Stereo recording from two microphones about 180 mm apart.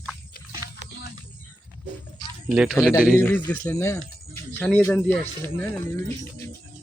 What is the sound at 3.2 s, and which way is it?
Speech, 10° left (ahead or behind).